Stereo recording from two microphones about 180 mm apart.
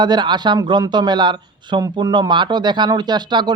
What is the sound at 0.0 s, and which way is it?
A man's voice, 25° right (ahead or behind).